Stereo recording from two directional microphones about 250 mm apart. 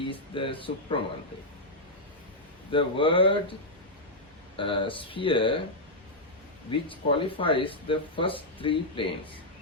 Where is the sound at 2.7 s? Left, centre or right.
Left.